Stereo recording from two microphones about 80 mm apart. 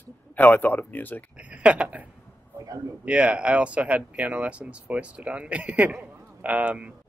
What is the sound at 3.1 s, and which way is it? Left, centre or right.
Speech, centre.